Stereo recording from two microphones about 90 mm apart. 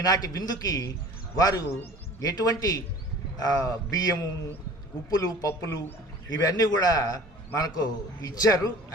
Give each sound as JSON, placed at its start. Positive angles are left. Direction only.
{"t": 0.0, "sound": "a man's voice", "side_deg": 45}